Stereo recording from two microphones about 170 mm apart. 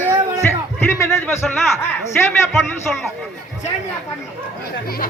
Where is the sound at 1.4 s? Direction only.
5° left (ahead or behind).